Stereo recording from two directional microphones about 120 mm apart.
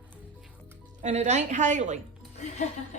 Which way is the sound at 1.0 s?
70° right (ahead or behind).